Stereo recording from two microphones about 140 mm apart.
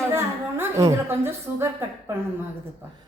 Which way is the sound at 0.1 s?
20° right (ahead or behind).